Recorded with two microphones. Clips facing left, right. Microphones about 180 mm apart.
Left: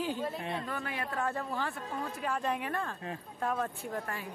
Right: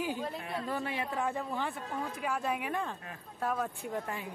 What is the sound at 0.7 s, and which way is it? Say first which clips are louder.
Speech: right 2 dB; 25° right (ahead or behind).